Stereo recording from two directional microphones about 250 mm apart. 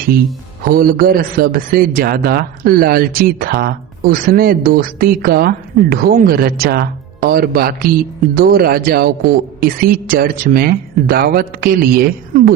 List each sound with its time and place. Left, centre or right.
0.6 s a man's voice: right